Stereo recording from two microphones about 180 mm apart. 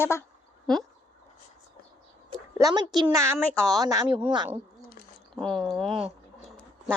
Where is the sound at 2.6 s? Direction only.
20° right (ahead or behind).